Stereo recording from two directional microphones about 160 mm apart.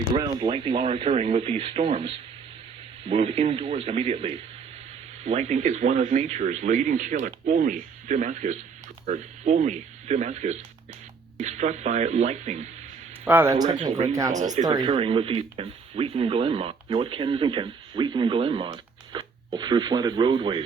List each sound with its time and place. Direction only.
0.2 s speech: 30° right (ahead or behind); by 12.6 s 45° right (ahead or behind)
13.2 s speech: 15° right (ahead or behind)
14.3 s speech: 50° right (ahead or behind)
14.6 s speech: 25° right (ahead or behind)